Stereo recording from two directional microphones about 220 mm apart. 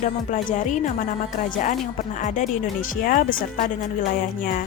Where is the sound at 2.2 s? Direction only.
35° left (ahead or behind).